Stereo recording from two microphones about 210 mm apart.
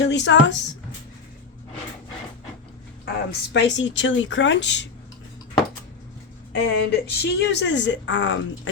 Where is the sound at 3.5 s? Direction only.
60° left (ahead or behind).